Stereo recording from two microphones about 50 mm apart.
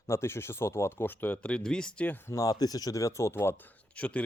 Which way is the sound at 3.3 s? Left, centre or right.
Left.